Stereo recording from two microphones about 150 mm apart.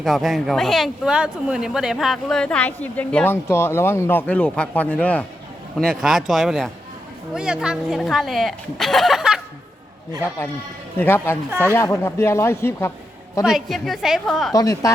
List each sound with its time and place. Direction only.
0.0 s speech: centre (ahead or behind)
10.9 s speech: 15° left (ahead or behind)
13.4 s speech: centre (ahead or behind)
14.5 s speech: 25° left (ahead or behind)